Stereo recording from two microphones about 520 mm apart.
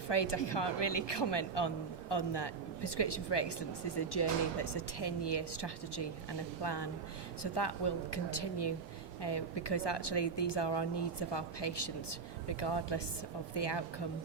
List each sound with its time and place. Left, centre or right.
0.1 s a woman's voice: left